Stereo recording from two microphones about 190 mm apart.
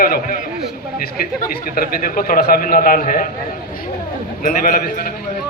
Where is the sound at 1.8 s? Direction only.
50° left (ahead or behind).